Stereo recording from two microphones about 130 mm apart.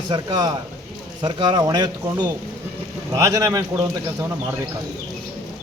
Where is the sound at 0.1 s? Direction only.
30° right (ahead or behind).